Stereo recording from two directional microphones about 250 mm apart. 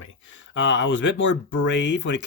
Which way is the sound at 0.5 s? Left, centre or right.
Left.